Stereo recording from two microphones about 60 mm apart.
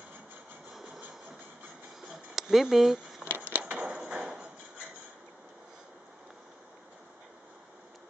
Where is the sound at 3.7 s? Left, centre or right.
Centre.